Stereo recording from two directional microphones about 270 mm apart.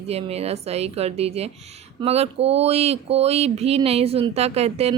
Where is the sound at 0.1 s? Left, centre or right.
Right.